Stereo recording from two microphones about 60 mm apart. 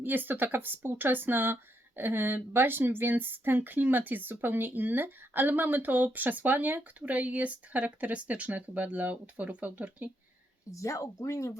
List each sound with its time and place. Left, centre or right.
0.0 s speech: right
10.7 s speech: left